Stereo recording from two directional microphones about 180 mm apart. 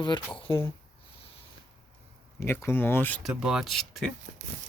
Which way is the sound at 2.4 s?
15° left (ahead or behind).